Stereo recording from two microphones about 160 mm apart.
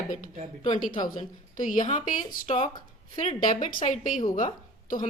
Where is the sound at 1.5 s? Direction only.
55° left (ahead or behind).